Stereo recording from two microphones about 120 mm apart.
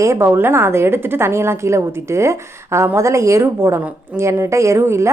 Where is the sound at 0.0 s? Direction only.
25° right (ahead or behind).